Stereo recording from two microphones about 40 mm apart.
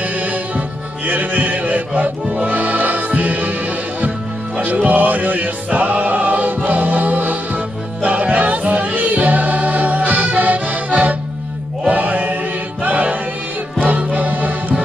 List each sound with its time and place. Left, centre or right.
0.0 s music: right
4.8 s music: right
8.0 s music: right
12.8 s choir: right
13.7 s music: right